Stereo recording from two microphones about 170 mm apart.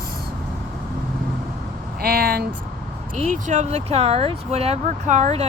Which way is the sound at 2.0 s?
60° right (ahead or behind).